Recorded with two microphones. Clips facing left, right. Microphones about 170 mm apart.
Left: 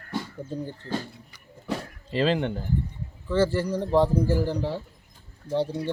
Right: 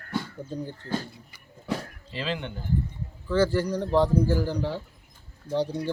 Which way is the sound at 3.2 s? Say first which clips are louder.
Even; 5° left (ahead or behind).